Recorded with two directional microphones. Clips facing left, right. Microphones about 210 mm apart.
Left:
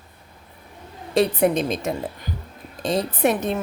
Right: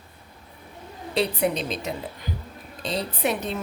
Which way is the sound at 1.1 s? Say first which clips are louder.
Left 5 dB; 50° left (ahead or behind).